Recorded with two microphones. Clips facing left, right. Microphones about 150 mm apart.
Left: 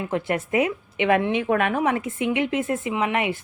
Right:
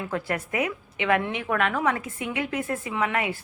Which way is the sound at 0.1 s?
25° left (ahead or behind).